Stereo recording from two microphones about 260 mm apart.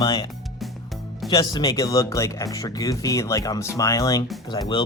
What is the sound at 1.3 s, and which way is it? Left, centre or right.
Speech, centre.